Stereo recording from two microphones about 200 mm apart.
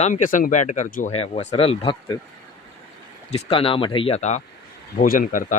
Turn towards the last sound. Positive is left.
turn(degrees=40)  # may be behind; listen again after turning